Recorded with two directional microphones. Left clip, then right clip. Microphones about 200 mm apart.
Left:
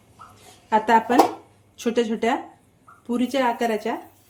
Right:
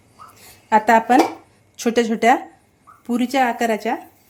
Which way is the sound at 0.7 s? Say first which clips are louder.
Right 4 dB; 45° right (ahead or behind).